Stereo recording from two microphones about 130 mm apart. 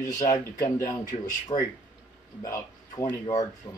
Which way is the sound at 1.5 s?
40° left (ahead or behind).